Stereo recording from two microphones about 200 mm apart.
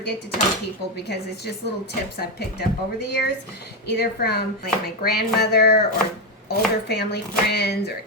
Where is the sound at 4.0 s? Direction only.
50° left (ahead or behind).